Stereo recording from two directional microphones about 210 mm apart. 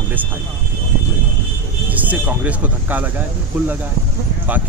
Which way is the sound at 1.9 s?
5° right (ahead or behind).